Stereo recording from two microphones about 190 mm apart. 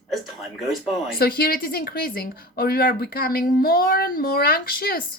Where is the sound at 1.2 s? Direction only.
50° left (ahead or behind).